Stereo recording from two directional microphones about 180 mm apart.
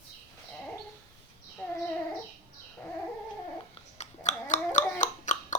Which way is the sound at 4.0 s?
40° left (ahead or behind).